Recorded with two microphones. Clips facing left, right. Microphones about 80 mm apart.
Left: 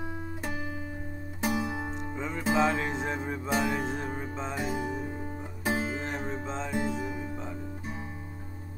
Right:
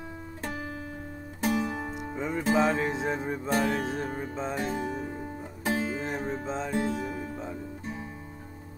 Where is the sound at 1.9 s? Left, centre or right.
Centre.